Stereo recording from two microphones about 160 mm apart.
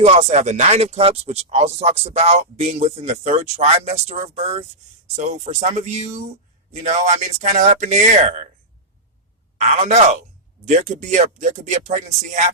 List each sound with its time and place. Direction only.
0.0 s speech: 45° right (ahead or behind)
9.6 s speech: 45° right (ahead or behind)